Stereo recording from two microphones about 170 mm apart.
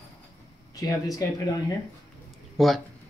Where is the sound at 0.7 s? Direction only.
20° left (ahead or behind).